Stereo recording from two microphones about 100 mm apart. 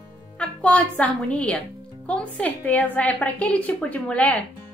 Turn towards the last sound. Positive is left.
turn(degrees=15)  # may be behind; listen again after turning